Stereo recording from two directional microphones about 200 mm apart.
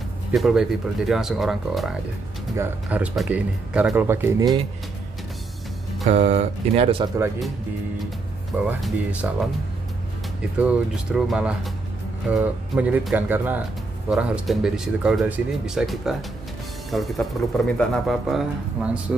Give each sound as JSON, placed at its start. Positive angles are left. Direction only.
{"t": 0.3, "sound": "speech", "side_deg": 0}
{"t": 6.0, "sound": "speech", "side_deg": -35}
{"t": 8.6, "sound": "speech", "side_deg": -5}
{"t": 10.6, "sound": "speech", "side_deg": 0}